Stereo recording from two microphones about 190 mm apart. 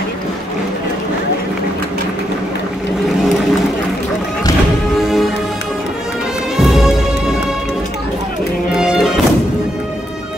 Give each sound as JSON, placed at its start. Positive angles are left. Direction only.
{"t": 6.5, "sound": "music", "side_deg": 0}
{"t": 8.7, "sound": "music", "side_deg": 0}